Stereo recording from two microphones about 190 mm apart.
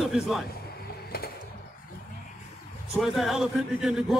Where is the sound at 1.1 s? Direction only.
55° left (ahead or behind).